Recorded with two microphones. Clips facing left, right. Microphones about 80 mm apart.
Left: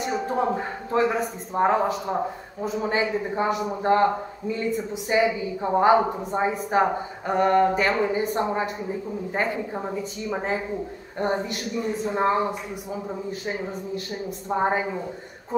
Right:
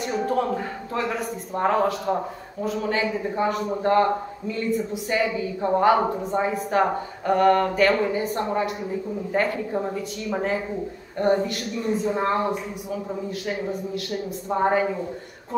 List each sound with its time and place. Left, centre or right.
0.3 s speech: left
9.3 s speech: centre
11.1 s speech: centre
11.4 s speech: right
11.8 s speech: centre
14.5 s speech: centre